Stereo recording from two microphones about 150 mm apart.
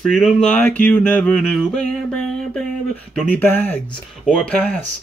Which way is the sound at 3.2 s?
10° left (ahead or behind).